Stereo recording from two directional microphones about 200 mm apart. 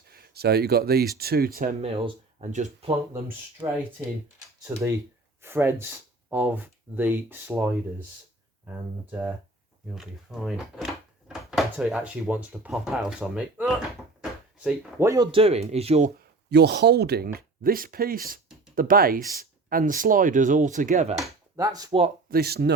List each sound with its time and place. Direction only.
0.1 s speech: 50° right (ahead or behind)
1.8 s speech: 35° right (ahead or behind)
3.6 s speech: 15° right (ahead or behind)
5.4 s speech: 10° right (ahead or behind)
9.9 s speech: centre (ahead or behind); by 16.1 s 35° right (ahead or behind)
16.5 s speech: 55° right (ahead or behind); by 21.2 s 35° right (ahead or behind)
21.5 s speech: 20° right (ahead or behind)
22.3 s speech: 50° right (ahead or behind)